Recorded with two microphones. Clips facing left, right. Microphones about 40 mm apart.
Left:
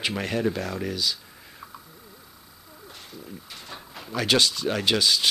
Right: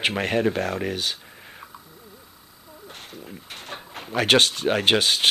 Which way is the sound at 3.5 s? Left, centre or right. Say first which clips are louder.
Right 4 dB; right.